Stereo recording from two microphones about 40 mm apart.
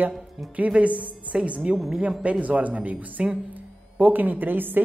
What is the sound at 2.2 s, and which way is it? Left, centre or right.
A woman's voice, right.